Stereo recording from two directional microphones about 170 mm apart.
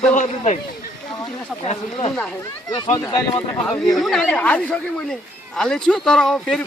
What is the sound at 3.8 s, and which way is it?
Speech, centre (ahead or behind).